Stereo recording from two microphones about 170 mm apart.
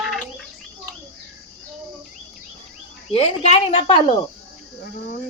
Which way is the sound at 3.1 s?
40° left (ahead or behind).